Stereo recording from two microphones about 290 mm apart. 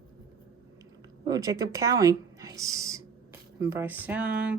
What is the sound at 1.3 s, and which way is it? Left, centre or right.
A woman's voice, centre.